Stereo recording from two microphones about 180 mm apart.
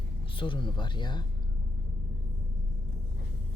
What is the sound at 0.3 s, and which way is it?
Speech, 25° left (ahead or behind).